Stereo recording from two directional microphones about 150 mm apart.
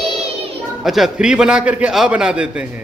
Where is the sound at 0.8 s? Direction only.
Centre (ahead or behind).